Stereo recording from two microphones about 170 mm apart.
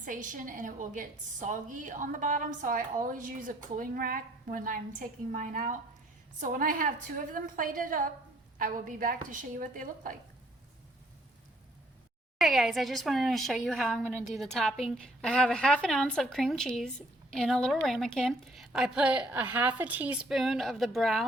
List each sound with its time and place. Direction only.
0.0 s a woman's voice: 50° right (ahead or behind)
12.4 s a woman's voice: centre (ahead or behind)
14.0 s a woman's voice: 10° right (ahead or behind)
14.3 s a woman's voice: centre (ahead or behind)